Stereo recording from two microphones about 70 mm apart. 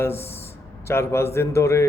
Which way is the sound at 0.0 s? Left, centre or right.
Left.